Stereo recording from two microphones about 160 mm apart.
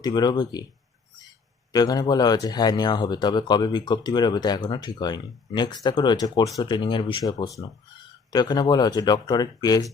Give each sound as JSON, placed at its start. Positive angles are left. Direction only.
{"t": 0.0, "sound": "speech", "side_deg": 25}
{"t": 1.7, "sound": "speech", "side_deg": 25}